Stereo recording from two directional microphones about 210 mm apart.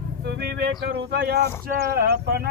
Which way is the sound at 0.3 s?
50° right (ahead or behind).